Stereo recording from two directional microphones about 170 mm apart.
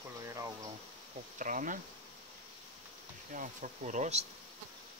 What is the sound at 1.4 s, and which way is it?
Speech, 50° right (ahead or behind).